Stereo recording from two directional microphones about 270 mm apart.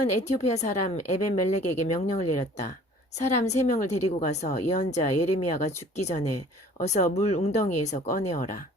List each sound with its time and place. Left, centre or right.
0.4 s a woman's voice: left